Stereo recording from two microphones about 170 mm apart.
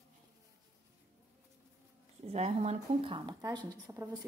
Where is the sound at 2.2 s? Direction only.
40° right (ahead or behind).